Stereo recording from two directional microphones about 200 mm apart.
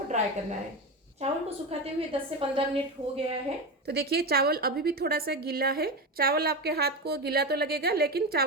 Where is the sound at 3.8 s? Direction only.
55° right (ahead or behind).